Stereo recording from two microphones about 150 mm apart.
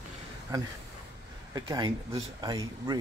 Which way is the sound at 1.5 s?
25° right (ahead or behind).